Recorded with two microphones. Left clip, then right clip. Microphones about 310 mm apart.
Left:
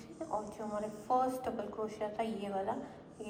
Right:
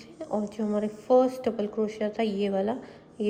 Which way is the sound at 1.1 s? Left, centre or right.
Centre.